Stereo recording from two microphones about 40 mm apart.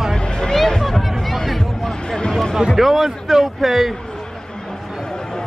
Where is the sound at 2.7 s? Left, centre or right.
Centre.